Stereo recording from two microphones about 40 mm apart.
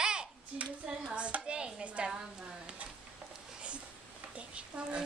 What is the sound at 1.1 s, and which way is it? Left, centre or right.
Hands, right.